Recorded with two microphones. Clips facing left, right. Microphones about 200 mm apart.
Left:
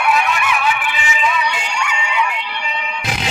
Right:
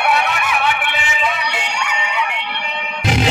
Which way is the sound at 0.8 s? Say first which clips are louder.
Left 1 dB; 65° right (ahead or behind).